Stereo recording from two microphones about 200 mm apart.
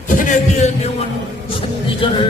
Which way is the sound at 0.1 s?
40° left (ahead or behind).